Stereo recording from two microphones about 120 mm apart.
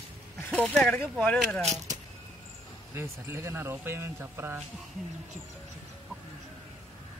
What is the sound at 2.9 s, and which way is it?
Speech, 20° right (ahead or behind).